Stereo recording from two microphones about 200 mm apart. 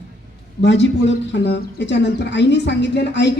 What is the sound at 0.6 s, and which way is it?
Speech, 65° left (ahead or behind).